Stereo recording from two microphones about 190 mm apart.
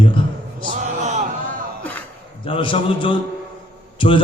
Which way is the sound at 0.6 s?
40° right (ahead or behind).